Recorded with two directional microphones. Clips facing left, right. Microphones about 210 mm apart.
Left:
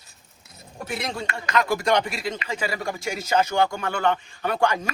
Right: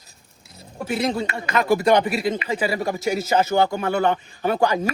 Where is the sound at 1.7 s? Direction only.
25° right (ahead or behind).